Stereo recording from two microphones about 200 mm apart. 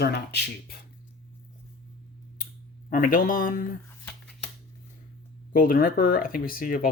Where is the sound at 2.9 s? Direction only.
45° left (ahead or behind).